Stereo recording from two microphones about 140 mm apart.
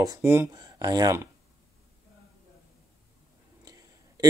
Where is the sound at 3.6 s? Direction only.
25° right (ahead or behind).